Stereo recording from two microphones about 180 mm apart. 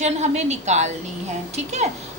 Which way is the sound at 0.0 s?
40° right (ahead or behind).